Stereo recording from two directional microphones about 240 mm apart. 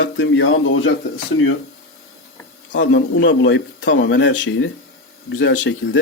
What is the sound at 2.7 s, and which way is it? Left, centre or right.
A man's voice, left.